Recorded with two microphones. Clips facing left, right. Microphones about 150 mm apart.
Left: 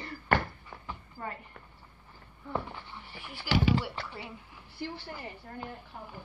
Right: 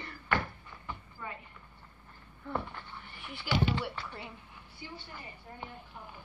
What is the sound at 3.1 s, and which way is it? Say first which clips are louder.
Speech: left 2 dB; 75° left (ahead or behind).